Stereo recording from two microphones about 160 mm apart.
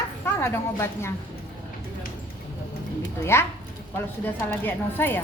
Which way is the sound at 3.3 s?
15° left (ahead or behind).